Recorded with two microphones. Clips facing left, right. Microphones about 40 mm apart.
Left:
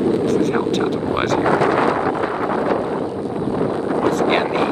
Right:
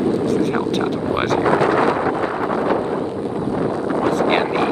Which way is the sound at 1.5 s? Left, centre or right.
Left.